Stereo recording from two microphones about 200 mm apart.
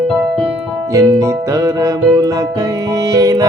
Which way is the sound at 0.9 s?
15° right (ahead or behind).